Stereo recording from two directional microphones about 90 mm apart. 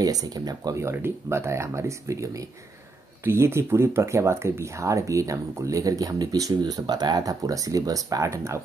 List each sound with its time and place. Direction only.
0.0 s speech: 45° right (ahead or behind)
0.8 s speech: 25° right (ahead or behind)